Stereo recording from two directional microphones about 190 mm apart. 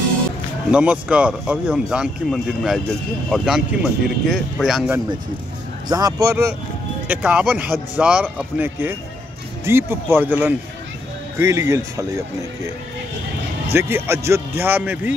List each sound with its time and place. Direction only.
0.7 s speech: 5° right (ahead or behind)
5.9 s speech: 20° right (ahead or behind)
13.7 s speech: 10° right (ahead or behind)